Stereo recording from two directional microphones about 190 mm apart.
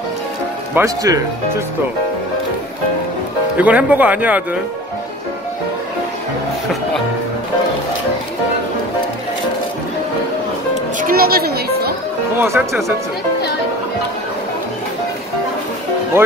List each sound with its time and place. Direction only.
0.7 s speech: 15° right (ahead or behind)
3.5 s speech: 10° right (ahead or behind)
11.0 s music: 50° right (ahead or behind)
12.4 s speech: 10° right (ahead or behind)